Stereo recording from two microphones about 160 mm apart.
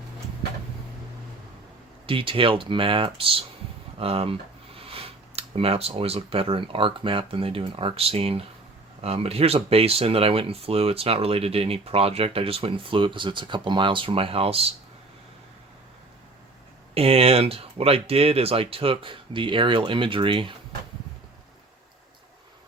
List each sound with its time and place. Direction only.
2.0 s speech: 35° right (ahead or behind)
16.9 s speech: 35° right (ahead or behind)